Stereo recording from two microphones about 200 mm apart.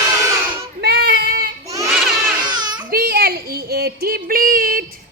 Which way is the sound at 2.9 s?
50° right (ahead or behind).